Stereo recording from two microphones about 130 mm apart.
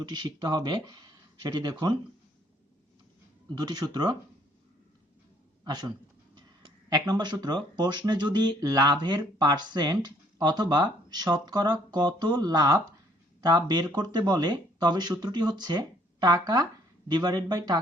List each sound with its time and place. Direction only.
0.0 s speech: 35° right (ahead or behind)
3.6 s speech: 30° right (ahead or behind)
5.6 s speech: 30° right (ahead or behind)